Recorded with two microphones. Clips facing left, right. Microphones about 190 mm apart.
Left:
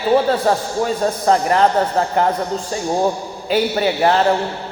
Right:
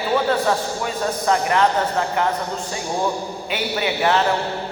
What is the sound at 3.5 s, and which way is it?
Speech, 40° left (ahead or behind).